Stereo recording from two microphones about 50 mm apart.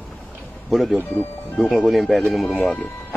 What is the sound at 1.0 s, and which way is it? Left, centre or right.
Speech, left.